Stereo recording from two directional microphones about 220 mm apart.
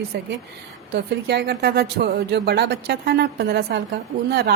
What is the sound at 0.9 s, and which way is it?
A woman's voice, 45° right (ahead or behind).